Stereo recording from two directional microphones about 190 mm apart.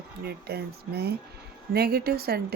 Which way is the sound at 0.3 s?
55° right (ahead or behind).